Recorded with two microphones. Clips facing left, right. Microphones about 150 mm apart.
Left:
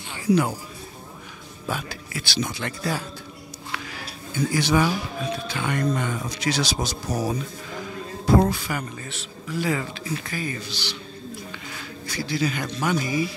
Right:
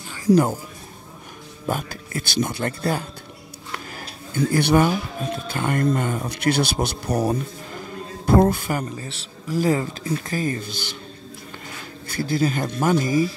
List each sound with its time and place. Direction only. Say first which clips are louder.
0.1 s a sound: right 4 dB; 40° right (ahead or behind)
1.7 s speech: right 4 dB; 50° right (ahead or behind)
8.4 s speech: right 4 dB; 50° right (ahead or behind)
8.9 s speech: right 2 dB; 30° right (ahead or behind); by 11.0 s 50° right (ahead or behind)
12.1 s speech: right 4 dB; 50° right (ahead or behind)